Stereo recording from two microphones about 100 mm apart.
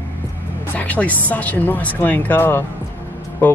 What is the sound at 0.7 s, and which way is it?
Speech, 15° left (ahead or behind).